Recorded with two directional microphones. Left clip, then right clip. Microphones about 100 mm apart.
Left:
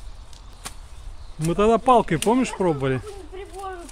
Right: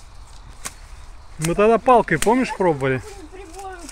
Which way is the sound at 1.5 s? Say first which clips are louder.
Right 3 dB; 15° left (ahead or behind).